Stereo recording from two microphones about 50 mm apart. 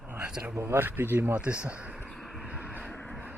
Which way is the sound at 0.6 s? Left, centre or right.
Right.